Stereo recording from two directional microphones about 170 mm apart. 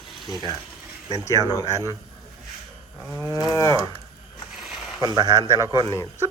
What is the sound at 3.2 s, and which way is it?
Cattle, 20° left (ahead or behind).